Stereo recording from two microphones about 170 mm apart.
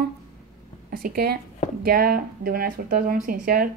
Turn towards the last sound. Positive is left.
turn(degrees=-55)  # may be behind; listen again after turning